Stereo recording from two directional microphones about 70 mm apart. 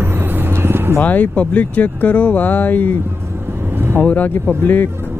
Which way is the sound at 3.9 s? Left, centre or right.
Left.